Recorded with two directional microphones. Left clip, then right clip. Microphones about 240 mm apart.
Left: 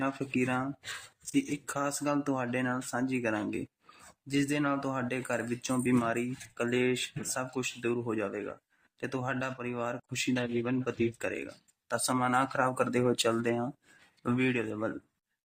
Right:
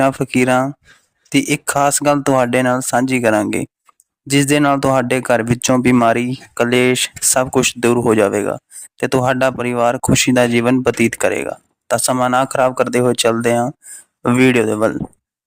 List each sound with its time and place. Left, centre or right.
0.0 s speech: right